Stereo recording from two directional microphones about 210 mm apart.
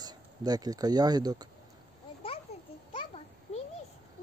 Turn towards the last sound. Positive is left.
turn(degrees=30)  # may be behind; listen again after turning